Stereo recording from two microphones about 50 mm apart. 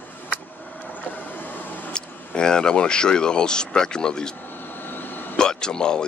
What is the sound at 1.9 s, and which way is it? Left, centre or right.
Speech, centre.